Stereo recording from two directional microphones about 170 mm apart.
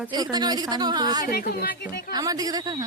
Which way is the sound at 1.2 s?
60° left (ahead or behind).